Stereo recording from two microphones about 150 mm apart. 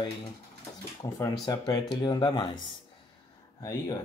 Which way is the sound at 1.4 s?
25° left (ahead or behind).